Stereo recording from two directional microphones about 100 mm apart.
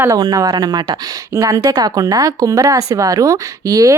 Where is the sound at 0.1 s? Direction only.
35° right (ahead or behind).